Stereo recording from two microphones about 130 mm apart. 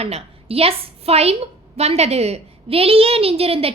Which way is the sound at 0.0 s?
50° right (ahead or behind).